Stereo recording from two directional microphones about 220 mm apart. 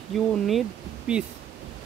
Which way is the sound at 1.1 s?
5° right (ahead or behind).